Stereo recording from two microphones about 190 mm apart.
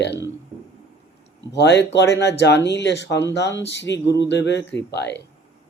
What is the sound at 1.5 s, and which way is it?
Speech, 65° left (ahead or behind).